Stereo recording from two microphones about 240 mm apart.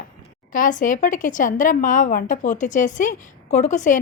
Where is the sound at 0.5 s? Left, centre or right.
Left.